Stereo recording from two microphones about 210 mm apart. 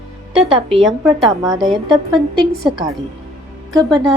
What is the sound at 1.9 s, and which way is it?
Speech, 20° right (ahead or behind).